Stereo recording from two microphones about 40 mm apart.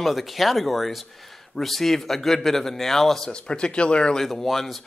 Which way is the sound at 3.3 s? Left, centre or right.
Left.